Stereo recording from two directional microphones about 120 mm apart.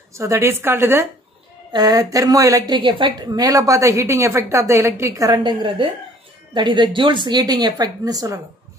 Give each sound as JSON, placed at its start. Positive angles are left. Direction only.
{"t": 0.1, "sound": "a woman's voice", "side_deg": -25}
{"t": 1.7, "sound": "a woman's voice", "side_deg": -30}